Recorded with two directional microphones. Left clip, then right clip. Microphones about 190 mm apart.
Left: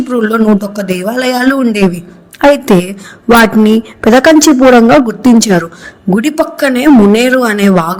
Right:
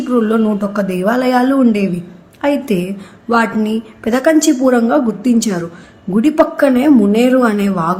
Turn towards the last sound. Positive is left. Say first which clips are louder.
# left 5 dB
turn(degrees=40)  # may be behind; listen again after turning